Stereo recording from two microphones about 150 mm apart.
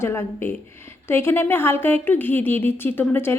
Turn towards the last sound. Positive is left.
turn(degrees=15)  # may be behind; listen again after turning